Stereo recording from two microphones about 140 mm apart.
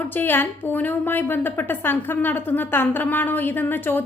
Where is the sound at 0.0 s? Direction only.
15° left (ahead or behind).